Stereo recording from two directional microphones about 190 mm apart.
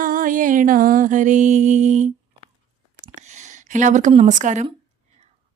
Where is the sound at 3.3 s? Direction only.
40° right (ahead or behind).